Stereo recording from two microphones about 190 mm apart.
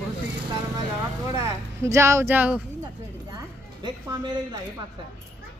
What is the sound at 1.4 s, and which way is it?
Speech, 15° right (ahead or behind).